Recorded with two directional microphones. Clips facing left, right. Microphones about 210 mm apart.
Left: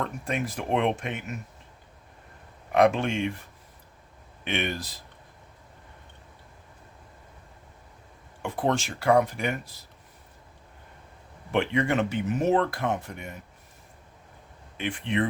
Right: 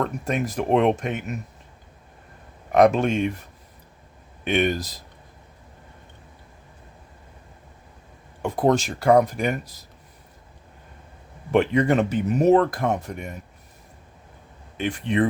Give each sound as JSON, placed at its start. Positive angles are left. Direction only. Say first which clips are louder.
{"t": 0.0, "sound": "speech", "louder": "right 5 dB", "side_deg": -40}
{"t": 2.7, "sound": "speech", "louder": "right 5 dB", "side_deg": -40}
{"t": 4.4, "sound": "speech", "louder": "right 8 dB", "side_deg": -40}
{"t": 8.4, "sound": "speech", "louder": "right 6 dB", "side_deg": -40}
{"t": 11.5, "sound": "speech", "louder": "right 6 dB", "side_deg": -40}
{"t": 14.8, "sound": "speech", "louder": "right 5 dB", "side_deg": -40}